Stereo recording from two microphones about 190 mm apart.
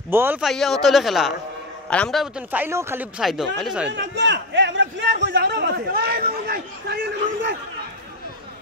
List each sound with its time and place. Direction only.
0.1 s a man's voice: 10° right (ahead or behind)
0.5 s a man's voice: centre (ahead or behind)
3.2 s speech: centre (ahead or behind)
3.9 s a man's voice: 70° right (ahead or behind); by 7.0 s 55° right (ahead or behind)